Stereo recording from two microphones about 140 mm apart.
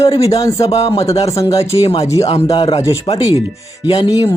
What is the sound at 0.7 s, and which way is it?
Speech, 45° left (ahead or behind).